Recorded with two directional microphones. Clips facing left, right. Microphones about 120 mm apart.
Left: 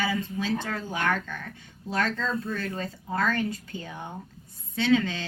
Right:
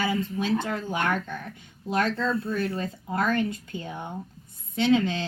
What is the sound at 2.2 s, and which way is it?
A woman's voice, 35° right (ahead or behind).